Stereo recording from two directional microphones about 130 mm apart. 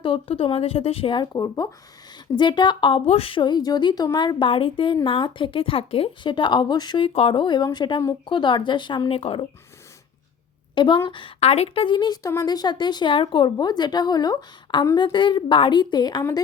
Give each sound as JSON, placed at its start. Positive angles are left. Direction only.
{"t": 0.0, "sound": "a woman's voice", "side_deg": 45}
{"t": 10.8, "sound": "a woman's voice", "side_deg": 40}